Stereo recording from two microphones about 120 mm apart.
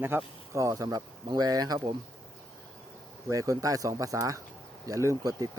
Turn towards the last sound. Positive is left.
turn(degrees=-30)  # may be behind; listen again after turning